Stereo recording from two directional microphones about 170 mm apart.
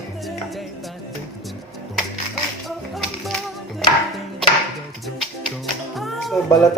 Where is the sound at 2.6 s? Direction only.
Centre (ahead or behind).